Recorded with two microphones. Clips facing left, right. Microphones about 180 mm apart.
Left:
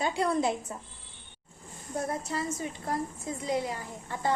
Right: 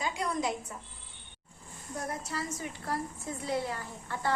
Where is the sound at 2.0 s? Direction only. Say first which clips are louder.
Left 4 dB; 25° left (ahead or behind).